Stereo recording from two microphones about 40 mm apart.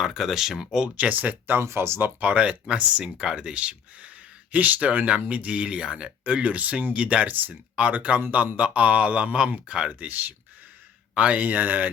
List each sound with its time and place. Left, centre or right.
0.0 s speech: centre
0.9 s speech: right
1.5 s speech: right
2.2 s speech: right
3.0 s speech: centre; by 9.3 s right
9.6 s speech: right
9.9 s speech: right
11.1 s speech: right